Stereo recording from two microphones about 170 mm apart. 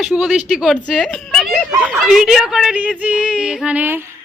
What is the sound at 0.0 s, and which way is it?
A woman's voice, centre (ahead or behind).